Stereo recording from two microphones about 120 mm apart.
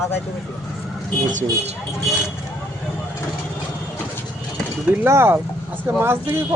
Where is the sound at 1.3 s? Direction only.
90° right.